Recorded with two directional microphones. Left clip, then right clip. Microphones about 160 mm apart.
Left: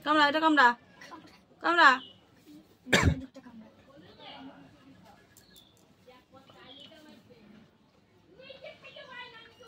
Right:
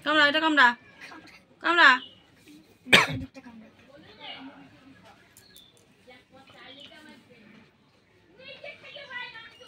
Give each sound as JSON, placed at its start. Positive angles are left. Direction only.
{"t": 0.0, "sound": "a woman's voice", "side_deg": 75}
{"t": 2.9, "sound": "speech", "side_deg": 10}